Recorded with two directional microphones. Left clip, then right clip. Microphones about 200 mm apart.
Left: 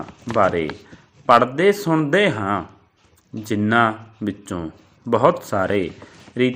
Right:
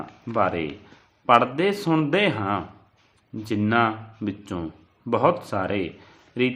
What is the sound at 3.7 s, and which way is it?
Speech, 15° left (ahead or behind).